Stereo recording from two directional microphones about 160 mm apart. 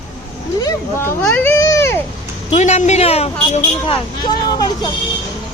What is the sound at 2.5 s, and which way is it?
Speech, 45° left (ahead or behind).